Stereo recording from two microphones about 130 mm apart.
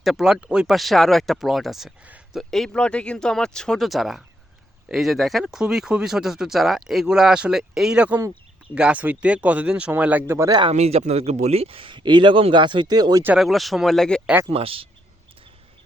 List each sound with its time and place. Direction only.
0.0 s speech: centre (ahead or behind)
2.4 s speech: 5° left (ahead or behind); by 10.5 s 20° right (ahead or behind)
10.7 s speech: 55° right (ahead or behind); by 13.2 s 30° right (ahead or behind)
13.2 s speech: 5° right (ahead or behind)
14.5 s speech: 45° right (ahead or behind)